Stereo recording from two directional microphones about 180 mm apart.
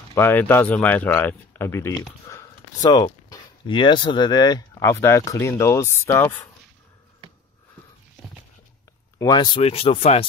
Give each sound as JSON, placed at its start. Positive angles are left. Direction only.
{"t": 0.1, "sound": "speech", "side_deg": 10}
{"t": 9.2, "sound": "speech", "side_deg": 25}